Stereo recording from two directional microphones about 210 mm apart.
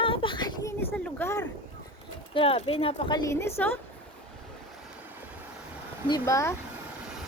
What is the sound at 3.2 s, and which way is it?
Speech, 15° left (ahead or behind).